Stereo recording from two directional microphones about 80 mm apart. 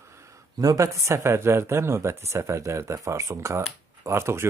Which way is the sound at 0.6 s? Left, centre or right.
Right.